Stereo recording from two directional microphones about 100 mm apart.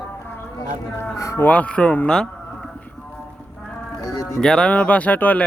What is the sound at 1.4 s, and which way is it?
Speech, 15° left (ahead or behind).